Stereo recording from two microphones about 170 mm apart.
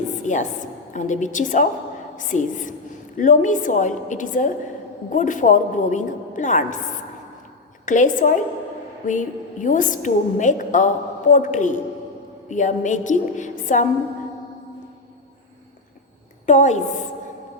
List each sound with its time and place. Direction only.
0.2 s a sound: 45° left (ahead or behind)
0.9 s a woman's voice: 45° left (ahead or behind)
7.9 s a woman's voice: 50° left (ahead or behind)
16.5 s a woman's voice: 45° left (ahead or behind)